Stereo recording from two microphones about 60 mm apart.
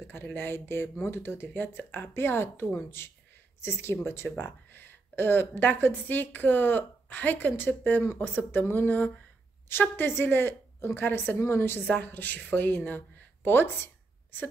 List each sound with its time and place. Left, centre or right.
0.0 s speech: left
11.9 s speech: left